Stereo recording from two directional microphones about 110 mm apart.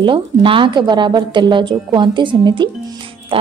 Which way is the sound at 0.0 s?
50° right (ahead or behind).